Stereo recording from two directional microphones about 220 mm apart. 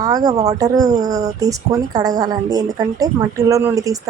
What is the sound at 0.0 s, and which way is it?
Speech, 15° right (ahead or behind).